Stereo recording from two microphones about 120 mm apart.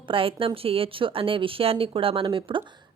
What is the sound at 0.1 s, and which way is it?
Speech, 50° right (ahead or behind).